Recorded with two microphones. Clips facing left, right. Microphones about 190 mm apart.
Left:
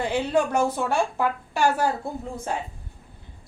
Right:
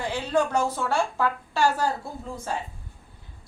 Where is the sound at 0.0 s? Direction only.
20° left (ahead or behind).